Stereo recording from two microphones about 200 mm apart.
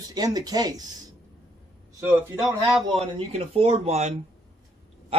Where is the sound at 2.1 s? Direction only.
15° right (ahead or behind).